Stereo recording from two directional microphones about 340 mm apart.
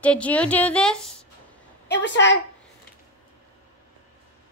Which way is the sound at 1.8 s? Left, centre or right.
Left.